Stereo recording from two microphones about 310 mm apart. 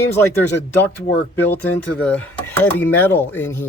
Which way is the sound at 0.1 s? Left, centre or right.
Centre.